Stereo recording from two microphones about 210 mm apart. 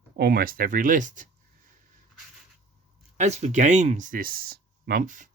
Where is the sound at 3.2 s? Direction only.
30° right (ahead or behind).